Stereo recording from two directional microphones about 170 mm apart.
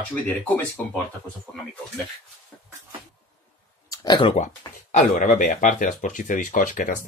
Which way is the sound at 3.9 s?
25° left (ahead or behind).